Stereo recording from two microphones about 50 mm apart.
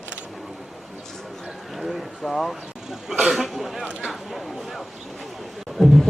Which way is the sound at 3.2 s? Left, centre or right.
Centre.